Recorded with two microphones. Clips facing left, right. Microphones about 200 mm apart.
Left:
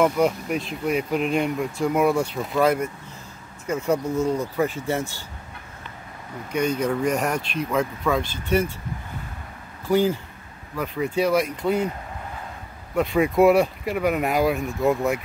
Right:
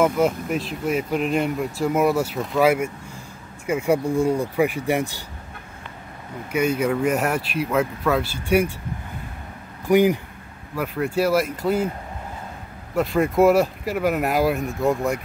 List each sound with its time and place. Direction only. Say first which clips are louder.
0.0 s speech: right 1 dB; centre (ahead or behind)
6.5 s speech: right 2 dB; 5° right (ahead or behind)
9.8 s speech: right 3 dB; 15° right (ahead or behind)
12.9 s speech: even; centre (ahead or behind)